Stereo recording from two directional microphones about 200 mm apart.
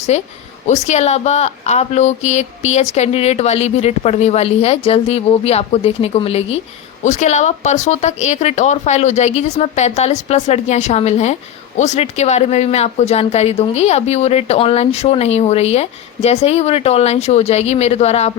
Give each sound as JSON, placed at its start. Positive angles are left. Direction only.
{"t": 0.1, "sound": "speech", "side_deg": 35}